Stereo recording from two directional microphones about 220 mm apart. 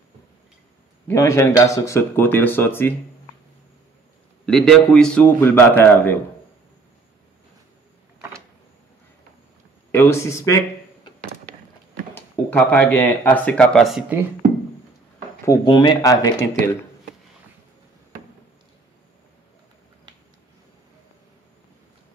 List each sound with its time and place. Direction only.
1.0 s speech: 15° left (ahead or behind)
4.5 s a man's voice: 5° left (ahead or behind)
9.8 s a man's voice: 10° left (ahead or behind)
12.1 s speech: 10° left (ahead or behind)
15.4 s speech: 15° left (ahead or behind)